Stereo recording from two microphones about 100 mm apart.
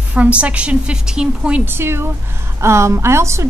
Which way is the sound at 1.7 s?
25° right (ahead or behind).